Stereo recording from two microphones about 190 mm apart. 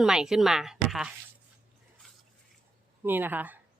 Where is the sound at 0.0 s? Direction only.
5° right (ahead or behind).